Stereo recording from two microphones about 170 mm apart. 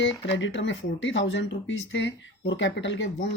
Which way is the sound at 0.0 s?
90° left.